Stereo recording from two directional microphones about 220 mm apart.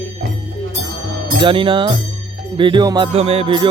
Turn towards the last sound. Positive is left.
turn(degrees=-25)  # may be behind; listen again after turning